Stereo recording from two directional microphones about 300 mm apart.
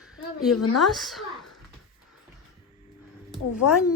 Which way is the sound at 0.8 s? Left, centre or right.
Centre.